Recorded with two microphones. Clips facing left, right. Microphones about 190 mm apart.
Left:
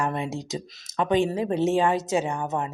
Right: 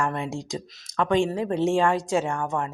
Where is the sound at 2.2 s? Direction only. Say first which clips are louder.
Right 1 dB; 20° left (ahead or behind).